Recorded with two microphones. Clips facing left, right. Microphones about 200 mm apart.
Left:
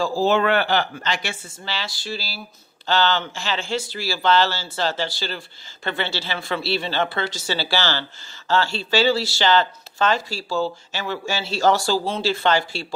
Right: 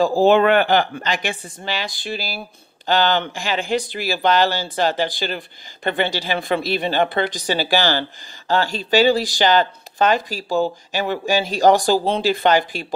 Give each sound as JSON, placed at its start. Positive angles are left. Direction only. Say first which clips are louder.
{"t": 0.3, "sound": "speech", "louder": "right 4 dB", "side_deg": -15}